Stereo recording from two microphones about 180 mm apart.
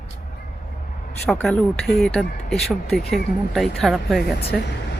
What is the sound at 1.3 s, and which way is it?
Speech, 5° left (ahead or behind).